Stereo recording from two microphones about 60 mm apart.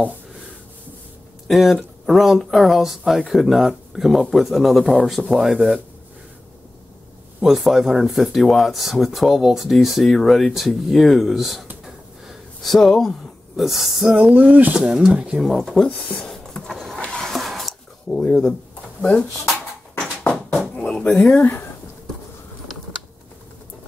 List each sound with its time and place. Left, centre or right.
1.5 s speech: centre
7.4 s speech: centre
11.8 s a sound: centre
13.6 s speech: centre
14.3 s speech: right
14.7 s speech: centre
15.4 s a sound: centre
18.0 s speech: centre
20.7 s a sound: left
21.4 s speech: left